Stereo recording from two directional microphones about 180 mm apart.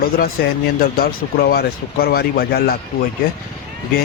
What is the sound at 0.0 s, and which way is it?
Speech, 55° left (ahead or behind).